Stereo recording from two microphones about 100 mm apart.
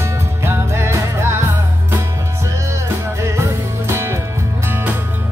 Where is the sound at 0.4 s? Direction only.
25° right (ahead or behind).